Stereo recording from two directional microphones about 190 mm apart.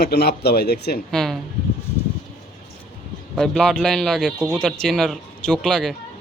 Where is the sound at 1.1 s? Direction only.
Centre (ahead or behind).